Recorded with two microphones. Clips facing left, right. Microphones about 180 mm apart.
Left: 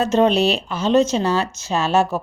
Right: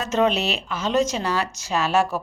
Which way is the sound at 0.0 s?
30° left (ahead or behind).